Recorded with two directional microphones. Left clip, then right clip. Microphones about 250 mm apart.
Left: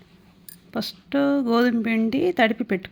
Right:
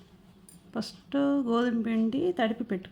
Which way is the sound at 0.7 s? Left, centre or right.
Centre.